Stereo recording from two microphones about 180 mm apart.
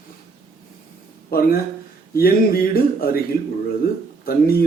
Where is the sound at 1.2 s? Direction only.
55° left (ahead or behind).